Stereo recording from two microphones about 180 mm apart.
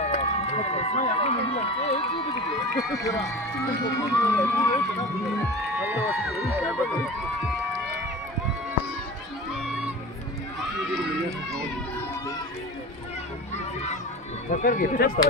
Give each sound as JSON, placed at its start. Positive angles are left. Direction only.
{"t": 0.0, "sound": "speech", "side_deg": 35}
{"t": 2.5, "sound": "speech", "side_deg": 0}
{"t": 2.9, "sound": "speech", "side_deg": 15}
{"t": 4.8, "sound": "speech", "side_deg": 0}
{"t": 7.4, "sound": "run", "side_deg": 0}
{"t": 9.5, "sound": "music", "side_deg": -5}
{"t": 14.5, "sound": "speech", "side_deg": 50}